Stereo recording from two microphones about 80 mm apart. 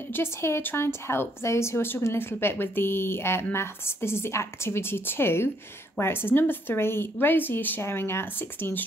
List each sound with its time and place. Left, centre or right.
0.1 s a woman's voice: left